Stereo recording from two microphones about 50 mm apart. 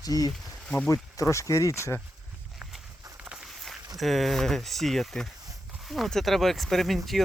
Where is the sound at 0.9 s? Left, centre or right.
Left.